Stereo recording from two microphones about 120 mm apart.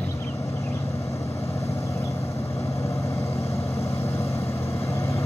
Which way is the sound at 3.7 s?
25° left (ahead or behind).